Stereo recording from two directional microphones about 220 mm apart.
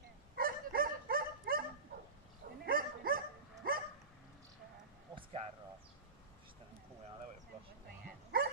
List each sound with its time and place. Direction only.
0.4 s dog: 40° right (ahead or behind)
2.6 s bow-wow: 40° right (ahead or behind)
3.6 s dog: 40° right (ahead or behind)
5.1 s a sound: 25° right (ahead or behind)
8.3 s dog: 45° right (ahead or behind)